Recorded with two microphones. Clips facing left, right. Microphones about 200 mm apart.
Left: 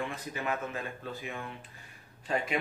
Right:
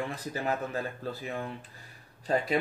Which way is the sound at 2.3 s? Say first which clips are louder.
Right 4 dB; 35° right (ahead or behind).